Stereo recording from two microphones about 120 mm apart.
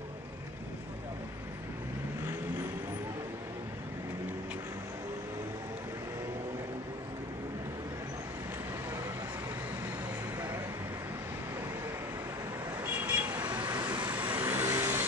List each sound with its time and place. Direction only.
12.9 s vehicle: 15° right (ahead or behind)
13.6 s vehicle: 40° right (ahead or behind)
14.3 s vehicle: 20° right (ahead or behind)